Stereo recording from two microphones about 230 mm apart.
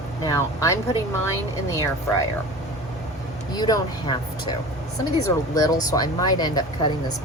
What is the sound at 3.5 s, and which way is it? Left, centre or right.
Speech, centre.